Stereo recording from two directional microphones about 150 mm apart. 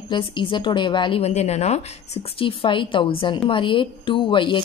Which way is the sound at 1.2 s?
45° left (ahead or behind).